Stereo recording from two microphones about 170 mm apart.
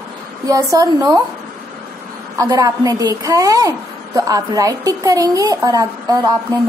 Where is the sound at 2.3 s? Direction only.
20° right (ahead or behind).